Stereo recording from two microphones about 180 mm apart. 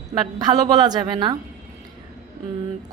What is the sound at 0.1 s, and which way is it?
A woman's voice, 20° right (ahead or behind).